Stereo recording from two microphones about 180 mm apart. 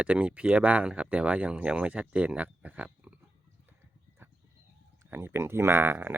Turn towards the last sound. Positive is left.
turn(degrees=-10)  # may be behind; listen again after turning